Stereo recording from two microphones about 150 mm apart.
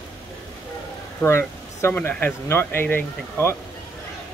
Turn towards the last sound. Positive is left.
turn(degrees=15)  # may be behind; listen again after turning